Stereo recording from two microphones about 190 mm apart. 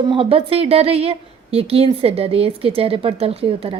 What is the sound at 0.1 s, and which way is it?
A woman's voice, 30° right (ahead or behind).